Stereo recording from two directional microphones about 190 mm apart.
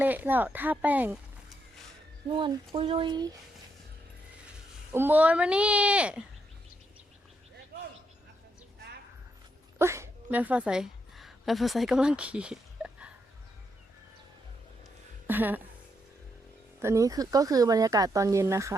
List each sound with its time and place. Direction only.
0.0 s a sound: 10° right (ahead or behind)
2.2 s speech: 25° right (ahead or behind)
4.9 s speech: 10° right (ahead or behind)
9.7 s a woman's voice: 15° right (ahead or behind)
15.3 s speech: 10° right (ahead or behind)
16.8 s speech: 15° right (ahead or behind)